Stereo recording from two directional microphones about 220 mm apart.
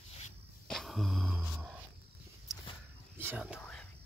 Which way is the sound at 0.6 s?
Centre (ahead or behind).